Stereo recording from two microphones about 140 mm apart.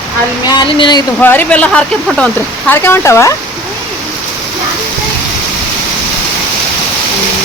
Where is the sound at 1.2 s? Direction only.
15° left (ahead or behind).